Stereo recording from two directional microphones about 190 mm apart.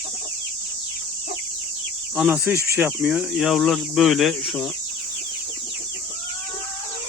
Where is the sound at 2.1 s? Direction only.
5° right (ahead or behind).